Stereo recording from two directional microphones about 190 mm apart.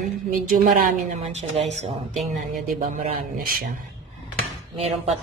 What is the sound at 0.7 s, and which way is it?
Speech, 45° right (ahead or behind).